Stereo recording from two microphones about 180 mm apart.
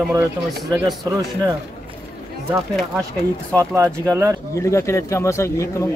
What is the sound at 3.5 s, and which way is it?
Speech, 15° right (ahead or behind).